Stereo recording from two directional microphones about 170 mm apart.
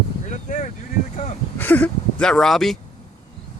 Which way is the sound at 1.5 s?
10° left (ahead or behind).